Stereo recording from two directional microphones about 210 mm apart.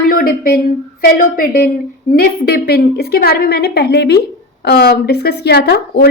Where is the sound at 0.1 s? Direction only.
45° left (ahead or behind).